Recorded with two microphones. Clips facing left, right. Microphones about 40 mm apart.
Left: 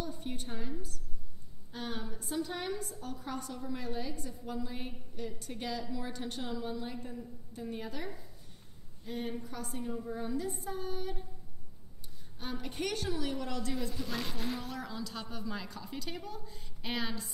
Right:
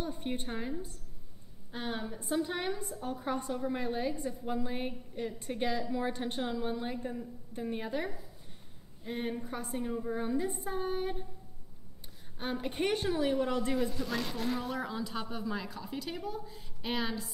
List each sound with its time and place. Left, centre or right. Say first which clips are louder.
0.0 s a woman's voice: right 3 dB; right
12.4 s a woman's voice: right 5 dB; right
13.9 s speech: right 3 dB; centre
14.7 s a woman's voice: right 4 dB; right; by 17.3 s centre